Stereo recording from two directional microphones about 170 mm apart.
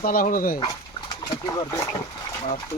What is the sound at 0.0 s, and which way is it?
Speech, 55° left (ahead or behind).